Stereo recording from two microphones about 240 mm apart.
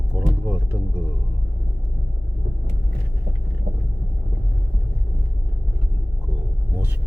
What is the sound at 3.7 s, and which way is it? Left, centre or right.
Vehicle, right.